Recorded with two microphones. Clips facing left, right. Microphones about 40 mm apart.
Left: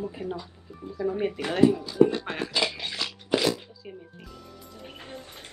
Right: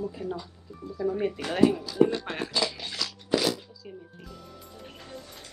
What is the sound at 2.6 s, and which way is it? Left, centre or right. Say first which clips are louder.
Dishes: left 2 dB; left.